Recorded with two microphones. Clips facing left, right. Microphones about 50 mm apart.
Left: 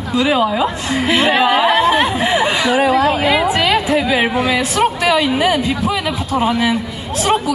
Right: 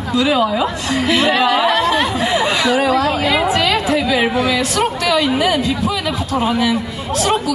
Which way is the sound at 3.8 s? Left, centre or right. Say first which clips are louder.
Left 1 dB; centre.